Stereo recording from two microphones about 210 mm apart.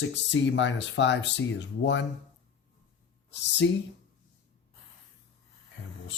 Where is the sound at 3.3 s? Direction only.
55° left (ahead or behind).